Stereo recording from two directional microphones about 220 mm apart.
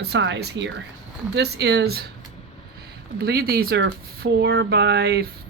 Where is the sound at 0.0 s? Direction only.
50° right (ahead or behind).